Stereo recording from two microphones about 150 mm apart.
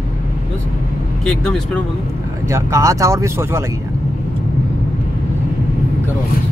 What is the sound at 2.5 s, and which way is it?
Speech, 20° right (ahead or behind).